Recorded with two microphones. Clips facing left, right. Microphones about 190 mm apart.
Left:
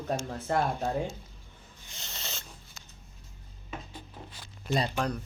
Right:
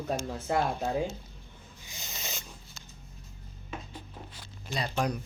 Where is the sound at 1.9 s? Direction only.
10° right (ahead or behind).